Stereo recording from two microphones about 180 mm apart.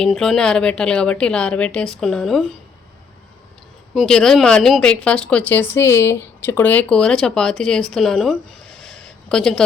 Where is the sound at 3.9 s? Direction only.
Centre (ahead or behind).